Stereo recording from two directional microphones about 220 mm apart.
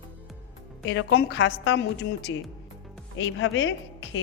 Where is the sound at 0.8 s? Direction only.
50° left (ahead or behind).